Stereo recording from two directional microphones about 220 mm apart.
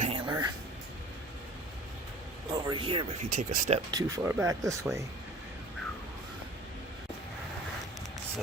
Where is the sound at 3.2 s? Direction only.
35° right (ahead or behind).